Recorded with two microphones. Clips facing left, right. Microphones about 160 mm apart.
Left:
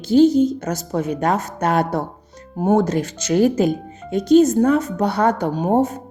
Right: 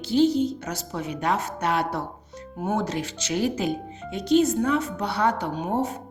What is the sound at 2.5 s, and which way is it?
Speech, 35° left (ahead or behind).